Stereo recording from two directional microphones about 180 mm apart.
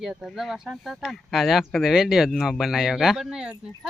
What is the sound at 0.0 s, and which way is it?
Speech, centre (ahead or behind).